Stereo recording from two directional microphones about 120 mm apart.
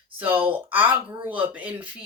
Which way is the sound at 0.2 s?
15° right (ahead or behind).